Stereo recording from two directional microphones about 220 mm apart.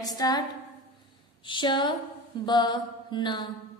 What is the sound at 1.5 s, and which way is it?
Speech, 20° left (ahead or behind).